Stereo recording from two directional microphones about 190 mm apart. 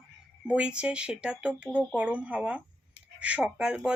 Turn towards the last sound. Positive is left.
turn(degrees=-5)  # may be behind; listen again after turning